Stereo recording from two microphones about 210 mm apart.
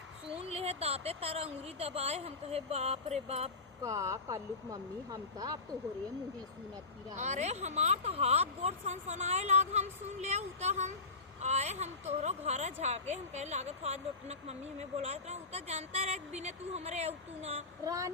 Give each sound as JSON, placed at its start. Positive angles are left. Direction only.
{"t": 0.3, "sound": "speech", "side_deg": -30}
{"t": 3.8, "sound": "speech", "side_deg": -15}
{"t": 7.2, "sound": "speech", "side_deg": -35}
{"t": 17.8, "sound": "speech", "side_deg": -15}